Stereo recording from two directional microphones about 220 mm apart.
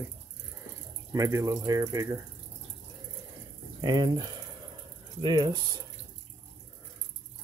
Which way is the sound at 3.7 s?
20° right (ahead or behind).